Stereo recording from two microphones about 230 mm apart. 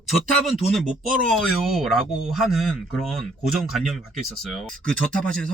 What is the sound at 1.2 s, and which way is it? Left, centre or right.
Speech, centre.